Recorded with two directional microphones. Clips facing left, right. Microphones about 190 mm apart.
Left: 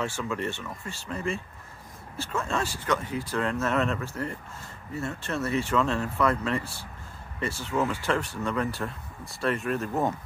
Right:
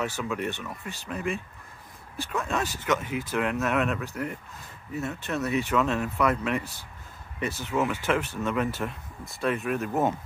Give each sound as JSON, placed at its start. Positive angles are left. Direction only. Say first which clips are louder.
{"t": 0.0, "sound": "speech", "louder": "right 1 dB", "side_deg": -15}
{"t": 9.6, "sound": "speech", "louder": "even", "side_deg": 0}